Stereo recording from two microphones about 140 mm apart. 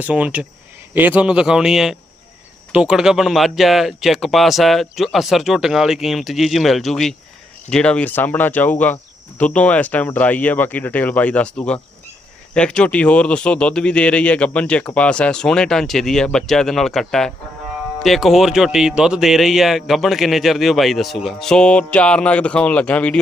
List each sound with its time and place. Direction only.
0.0 s speech: 10° right (ahead or behind); by 23.1 s 10° left (ahead or behind)